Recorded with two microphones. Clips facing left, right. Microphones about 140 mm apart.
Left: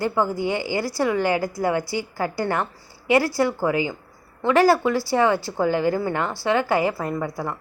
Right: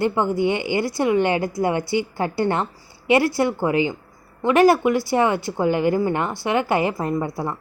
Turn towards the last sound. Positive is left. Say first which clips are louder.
# right 3 dB
turn(degrees=-20)  # may be behind; listen again after turning